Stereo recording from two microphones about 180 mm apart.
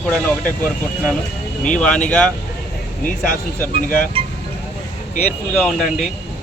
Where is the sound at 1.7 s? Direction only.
5° left (ahead or behind).